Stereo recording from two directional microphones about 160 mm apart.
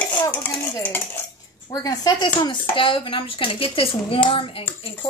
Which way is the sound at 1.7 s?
25° left (ahead or behind).